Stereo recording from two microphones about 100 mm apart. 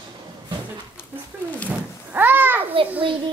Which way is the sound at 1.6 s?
20° right (ahead or behind).